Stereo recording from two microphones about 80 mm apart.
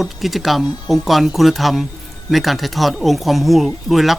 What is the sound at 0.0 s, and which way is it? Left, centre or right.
Speech, centre.